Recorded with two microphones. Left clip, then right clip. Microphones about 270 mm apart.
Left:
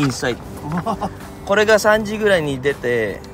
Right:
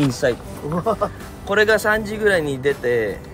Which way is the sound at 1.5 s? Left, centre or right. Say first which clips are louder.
Left 3 dB; centre.